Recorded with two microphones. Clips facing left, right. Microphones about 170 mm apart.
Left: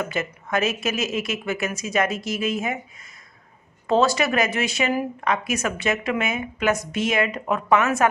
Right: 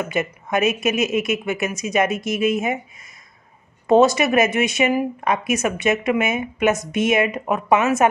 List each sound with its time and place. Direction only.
0.0 s a woman's voice: 20° right (ahead or behind)
3.8 s a woman's voice: 20° right (ahead or behind)